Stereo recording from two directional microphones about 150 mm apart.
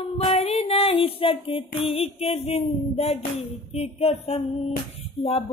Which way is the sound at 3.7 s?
40° left (ahead or behind).